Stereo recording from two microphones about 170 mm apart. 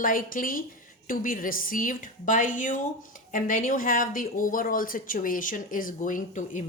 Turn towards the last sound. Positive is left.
turn(degrees=50)  # may be behind; listen again after turning